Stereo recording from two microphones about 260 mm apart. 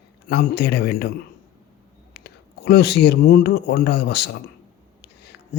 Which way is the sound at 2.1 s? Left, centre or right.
Left.